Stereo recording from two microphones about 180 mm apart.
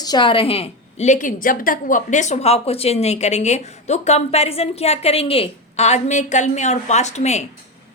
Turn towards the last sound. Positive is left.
turn(degrees=40)  # may be behind; listen again after turning